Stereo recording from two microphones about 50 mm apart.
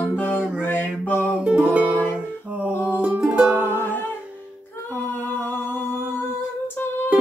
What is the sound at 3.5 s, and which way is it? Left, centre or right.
Music, right.